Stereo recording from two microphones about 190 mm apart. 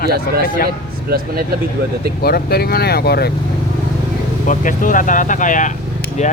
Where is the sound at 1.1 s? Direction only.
55° right (ahead or behind).